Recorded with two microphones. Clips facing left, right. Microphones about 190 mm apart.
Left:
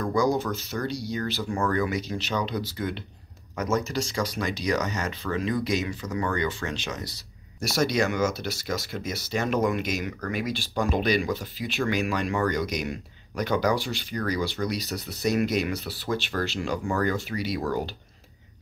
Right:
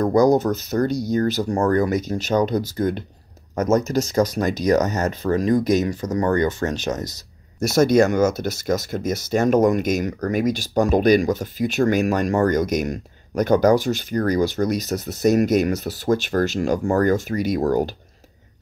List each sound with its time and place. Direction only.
0.0 s speech: 45° right (ahead or behind)